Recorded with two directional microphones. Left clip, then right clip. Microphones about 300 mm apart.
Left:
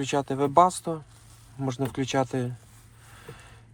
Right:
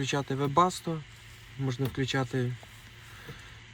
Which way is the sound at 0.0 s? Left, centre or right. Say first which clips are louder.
Left 5 dB; centre.